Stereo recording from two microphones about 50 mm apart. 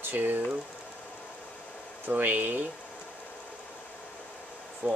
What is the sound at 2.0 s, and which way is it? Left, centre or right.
Speech, right.